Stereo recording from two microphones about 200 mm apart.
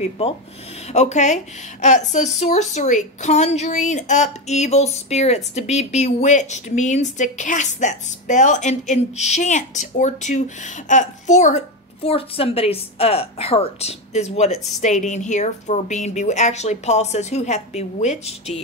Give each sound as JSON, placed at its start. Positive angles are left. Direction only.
{"t": 0.9, "sound": "speech", "side_deg": 35}